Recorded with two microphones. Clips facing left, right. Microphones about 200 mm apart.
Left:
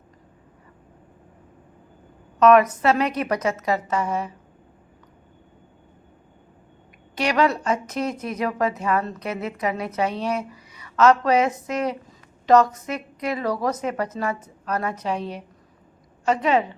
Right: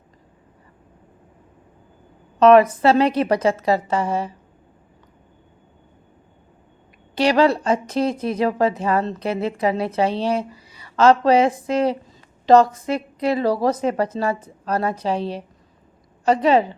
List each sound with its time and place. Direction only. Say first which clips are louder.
2.4 s a woman's voice: right 3 dB; 30° right (ahead or behind)
7.2 s a woman's voice: right 5 dB; 30° right (ahead or behind)